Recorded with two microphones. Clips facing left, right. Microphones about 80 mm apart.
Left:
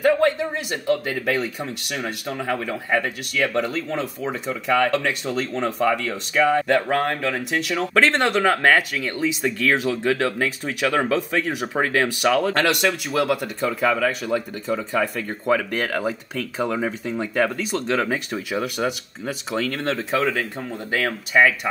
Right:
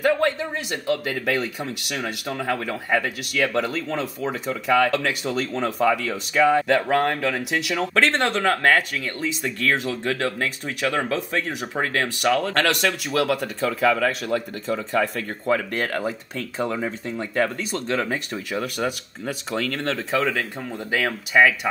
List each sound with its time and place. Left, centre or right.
0.0 s speech: centre
11.6 s speech: centre
12.5 s speech: centre